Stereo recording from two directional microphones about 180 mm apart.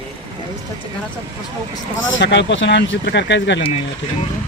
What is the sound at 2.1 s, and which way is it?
Speech, 80° left.